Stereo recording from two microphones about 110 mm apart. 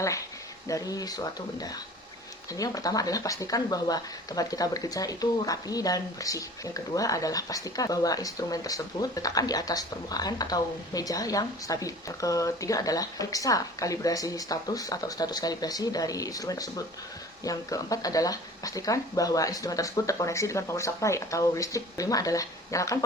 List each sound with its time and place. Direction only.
0.7 s speech: 30° left (ahead or behind)